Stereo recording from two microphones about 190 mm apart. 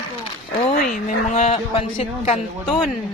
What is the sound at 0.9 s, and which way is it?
A woman's voice, 40° left (ahead or behind).